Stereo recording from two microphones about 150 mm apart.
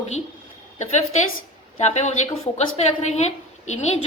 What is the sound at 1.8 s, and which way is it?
A woman's voice, 50° left (ahead or behind).